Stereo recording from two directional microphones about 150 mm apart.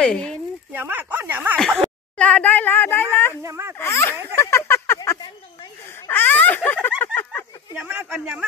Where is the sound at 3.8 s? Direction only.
15° left (ahead or behind).